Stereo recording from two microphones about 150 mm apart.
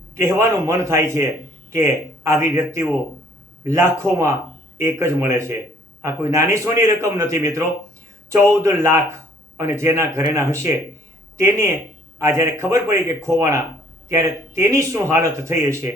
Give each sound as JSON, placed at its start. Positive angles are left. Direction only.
{"t": 0.1, "sound": "speech", "side_deg": -20}